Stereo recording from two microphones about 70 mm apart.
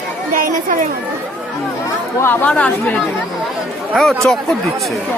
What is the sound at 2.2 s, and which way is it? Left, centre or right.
Speech, left.